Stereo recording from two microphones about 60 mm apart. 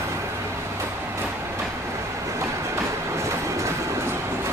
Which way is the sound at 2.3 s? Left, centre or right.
Right.